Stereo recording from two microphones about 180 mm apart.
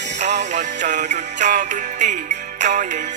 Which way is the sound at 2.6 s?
40° right (ahead or behind).